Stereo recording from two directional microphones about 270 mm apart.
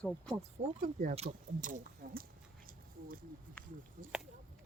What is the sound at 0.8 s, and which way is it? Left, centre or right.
Speech, right.